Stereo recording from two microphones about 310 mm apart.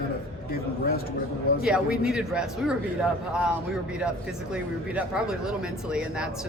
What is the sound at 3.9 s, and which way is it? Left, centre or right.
Speech, centre.